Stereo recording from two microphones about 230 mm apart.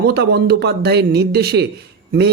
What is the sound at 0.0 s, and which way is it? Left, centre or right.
Speech, right.